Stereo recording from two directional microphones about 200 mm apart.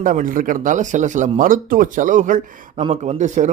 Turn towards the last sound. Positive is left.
turn(degrees=-35)  # may be behind; listen again after turning